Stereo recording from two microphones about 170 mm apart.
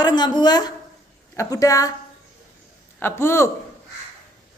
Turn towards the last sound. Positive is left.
turn(degrees=15)  # may be behind; listen again after turning